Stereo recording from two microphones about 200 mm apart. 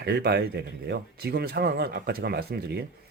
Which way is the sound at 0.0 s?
55° right (ahead or behind).